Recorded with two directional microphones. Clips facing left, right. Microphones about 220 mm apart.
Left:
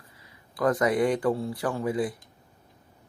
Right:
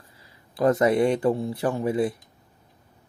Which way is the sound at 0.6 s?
25° right (ahead or behind).